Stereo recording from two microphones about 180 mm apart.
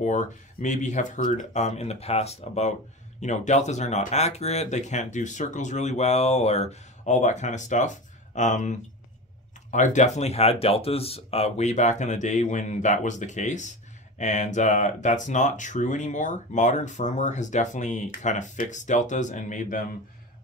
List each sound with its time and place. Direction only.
0.0 s speech: 45° left (ahead or behind)